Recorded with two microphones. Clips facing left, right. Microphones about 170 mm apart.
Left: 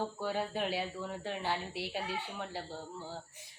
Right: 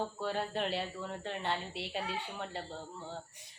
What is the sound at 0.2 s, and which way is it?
A woman's voice, 5° left (ahead or behind).